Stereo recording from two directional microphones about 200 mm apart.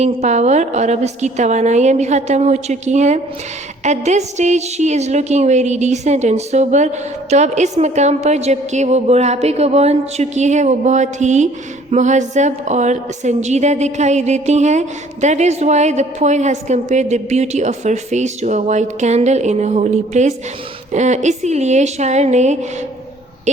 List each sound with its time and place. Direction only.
0.0 s a woman's voice: 35° right (ahead or behind)